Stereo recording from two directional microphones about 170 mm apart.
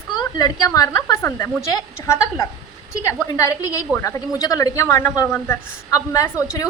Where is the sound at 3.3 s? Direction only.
20° left (ahead or behind).